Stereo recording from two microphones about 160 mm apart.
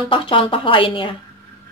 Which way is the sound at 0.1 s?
30° left (ahead or behind).